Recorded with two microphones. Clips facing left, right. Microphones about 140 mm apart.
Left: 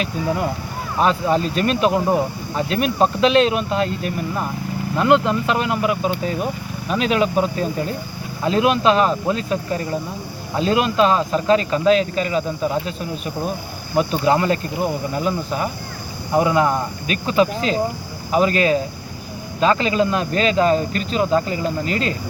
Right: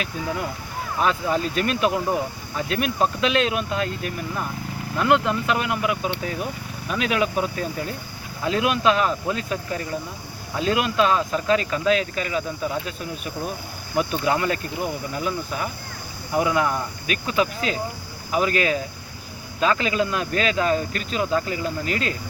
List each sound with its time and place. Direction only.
0.9 s speech: 35° left (ahead or behind)
5.5 s speech: 35° left (ahead or behind)
6.8 s speech: 30° left (ahead or behind)
13.9 s speech: 35° left (ahead or behind)